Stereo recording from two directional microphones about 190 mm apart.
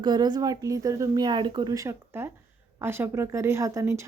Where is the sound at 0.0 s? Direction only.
20° right (ahead or behind).